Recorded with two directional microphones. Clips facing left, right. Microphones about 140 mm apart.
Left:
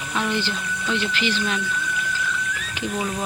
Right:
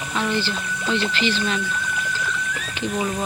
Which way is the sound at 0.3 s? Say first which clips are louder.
Right 1 dB; 15° left (ahead or behind).